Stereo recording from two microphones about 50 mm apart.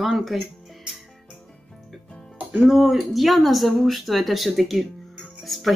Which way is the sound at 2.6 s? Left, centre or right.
Centre.